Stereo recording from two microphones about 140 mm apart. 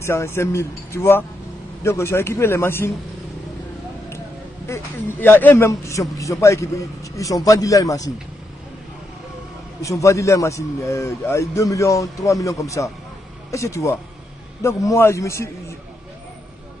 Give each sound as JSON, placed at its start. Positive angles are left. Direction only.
{"t": 0.0, "sound": "a man's voice", "side_deg": 20}
{"t": 4.7, "sound": "a man's voice", "side_deg": 20}
{"t": 9.8, "sound": "a man's voice", "side_deg": 20}